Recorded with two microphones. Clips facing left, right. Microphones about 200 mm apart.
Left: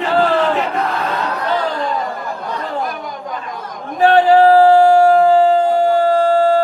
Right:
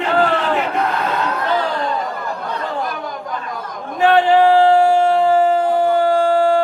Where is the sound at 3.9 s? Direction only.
40° left (ahead or behind).